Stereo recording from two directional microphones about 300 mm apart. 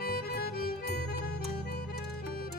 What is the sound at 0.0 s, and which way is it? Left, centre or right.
Music, left.